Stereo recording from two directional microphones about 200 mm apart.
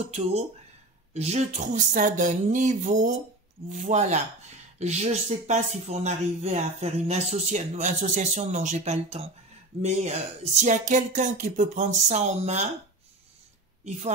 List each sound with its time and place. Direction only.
0.0 s speech: 30° right (ahead or behind)